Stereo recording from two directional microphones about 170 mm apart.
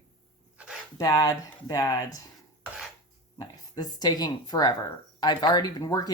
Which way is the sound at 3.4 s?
25° left (ahead or behind).